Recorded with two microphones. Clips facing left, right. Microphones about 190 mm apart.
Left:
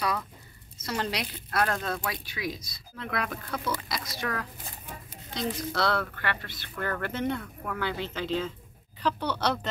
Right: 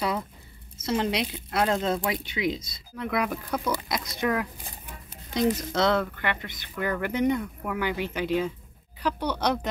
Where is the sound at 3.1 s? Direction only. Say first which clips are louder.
Right 5 dB; 5° right (ahead or behind).